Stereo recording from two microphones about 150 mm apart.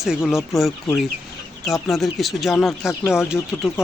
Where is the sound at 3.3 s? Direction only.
15° left (ahead or behind).